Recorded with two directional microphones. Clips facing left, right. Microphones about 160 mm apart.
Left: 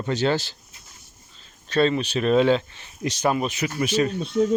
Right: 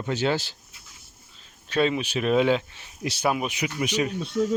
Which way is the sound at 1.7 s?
10° right (ahead or behind).